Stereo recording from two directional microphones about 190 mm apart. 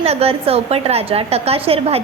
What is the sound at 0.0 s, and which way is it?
A woman's voice, 30° right (ahead or behind).